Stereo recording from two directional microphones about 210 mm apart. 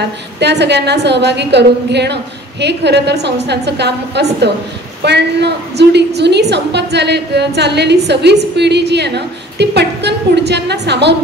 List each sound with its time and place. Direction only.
0.4 s a woman's voice: 55° right (ahead or behind)